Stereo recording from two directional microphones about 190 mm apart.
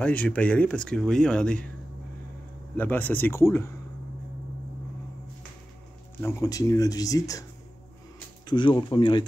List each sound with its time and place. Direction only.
0.0 s speech: 5° left (ahead or behind)
2.7 s speech: 10° left (ahead or behind)
6.2 s speech: 15° left (ahead or behind)
8.5 s speech: 25° left (ahead or behind)